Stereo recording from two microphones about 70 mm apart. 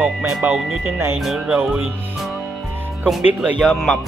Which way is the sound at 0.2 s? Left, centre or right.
Right.